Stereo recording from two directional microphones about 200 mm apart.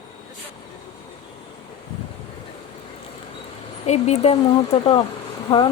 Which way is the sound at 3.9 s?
35° left (ahead or behind).